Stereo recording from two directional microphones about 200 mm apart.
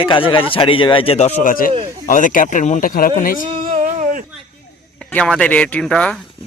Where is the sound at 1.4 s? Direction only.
45° left (ahead or behind).